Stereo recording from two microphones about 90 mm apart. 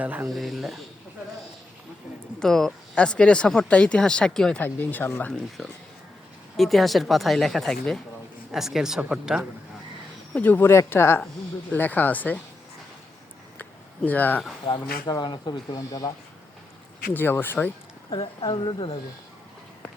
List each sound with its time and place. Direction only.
0.0 s speech: 20° right (ahead or behind)
0.3 s speech: centre (ahead or behind)
2.4 s speech: 5° left (ahead or behind)
4.6 s speech: 20° left (ahead or behind)
5.6 s speech: 5° left (ahead or behind)
10.3 s speech: 20° left (ahead or behind)
10.7 s speech: 30° left (ahead or behind)
13.6 s a sound: 20° left (ahead or behind)
15.0 s speech: 55° left (ahead or behind)
15.7 s speech: 40° left (ahead or behind)
17.2 s speech: 25° left (ahead or behind)
18.1 s speech: 70° left (ahead or behind)